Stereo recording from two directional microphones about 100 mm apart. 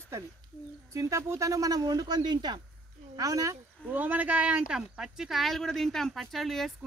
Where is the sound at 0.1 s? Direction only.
25° right (ahead or behind); by 2.6 s 45° right (ahead or behind).